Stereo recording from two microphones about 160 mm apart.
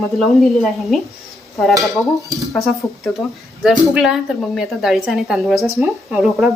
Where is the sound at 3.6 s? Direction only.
Centre (ahead or behind).